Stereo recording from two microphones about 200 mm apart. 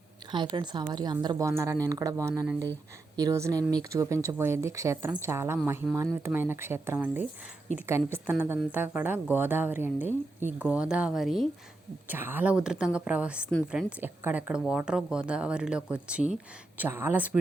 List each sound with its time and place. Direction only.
0.3 s a woman's voice: 25° right (ahead or behind)